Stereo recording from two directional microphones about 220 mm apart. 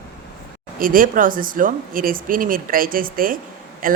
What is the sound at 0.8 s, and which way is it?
A woman's voice, 40° right (ahead or behind).